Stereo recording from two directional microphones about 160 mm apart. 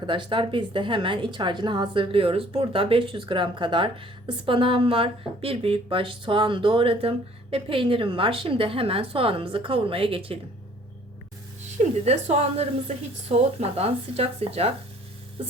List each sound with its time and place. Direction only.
0.0 s a woman's voice: 30° right (ahead or behind)
11.8 s a woman's voice: 40° right (ahead or behind)